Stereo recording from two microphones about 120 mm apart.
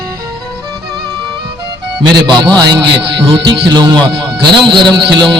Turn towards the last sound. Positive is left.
turn(degrees=-45)  # may be behind; listen again after turning